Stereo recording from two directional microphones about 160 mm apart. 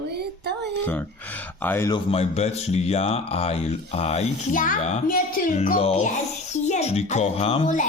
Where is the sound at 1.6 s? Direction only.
15° left (ahead or behind).